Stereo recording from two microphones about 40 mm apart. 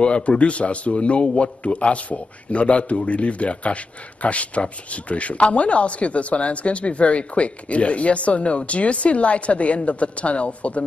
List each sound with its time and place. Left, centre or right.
0.0 s a man's voice: left